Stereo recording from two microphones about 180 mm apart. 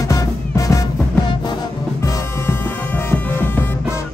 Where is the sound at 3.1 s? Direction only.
10° left (ahead or behind).